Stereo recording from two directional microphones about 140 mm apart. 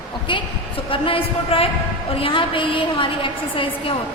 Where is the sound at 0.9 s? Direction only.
40° left (ahead or behind).